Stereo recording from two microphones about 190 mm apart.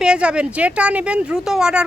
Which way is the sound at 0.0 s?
5° right (ahead or behind).